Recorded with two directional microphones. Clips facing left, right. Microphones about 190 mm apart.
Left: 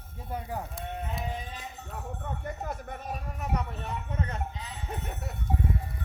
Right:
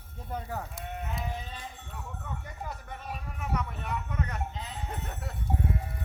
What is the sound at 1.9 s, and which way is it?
Speech, 50° left (ahead or behind).